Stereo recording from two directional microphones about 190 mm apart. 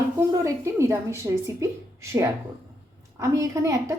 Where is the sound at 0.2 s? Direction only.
15° right (ahead or behind).